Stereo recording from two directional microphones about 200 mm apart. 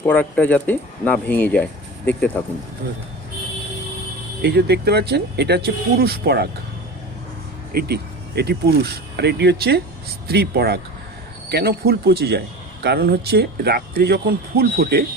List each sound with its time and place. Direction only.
0.0 s speech: 10° left (ahead or behind)
4.4 s speech: 55° right (ahead or behind)
7.7 s speech: 50° right (ahead or behind)